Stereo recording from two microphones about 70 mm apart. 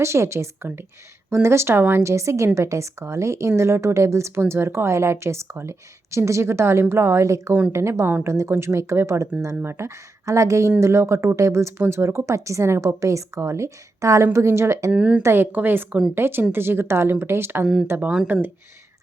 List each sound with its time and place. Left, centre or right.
0.0 s a woman's voice: right
14.9 s a woman's voice: centre
15.2 s a woman's voice: right